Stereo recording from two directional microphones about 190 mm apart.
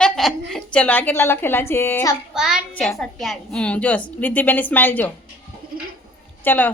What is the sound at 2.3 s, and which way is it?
A child's voice, 5° right (ahead or behind).